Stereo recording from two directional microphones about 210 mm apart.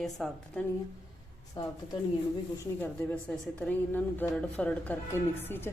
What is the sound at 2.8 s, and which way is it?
A woman's voice, 10° left (ahead or behind).